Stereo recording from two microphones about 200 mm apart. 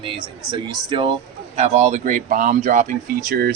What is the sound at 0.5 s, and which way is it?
A man's voice, 25° right (ahead or behind).